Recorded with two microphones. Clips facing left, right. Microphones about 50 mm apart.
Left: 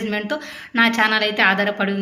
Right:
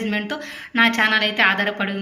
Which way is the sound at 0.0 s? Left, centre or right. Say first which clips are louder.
Left 1 dB; right.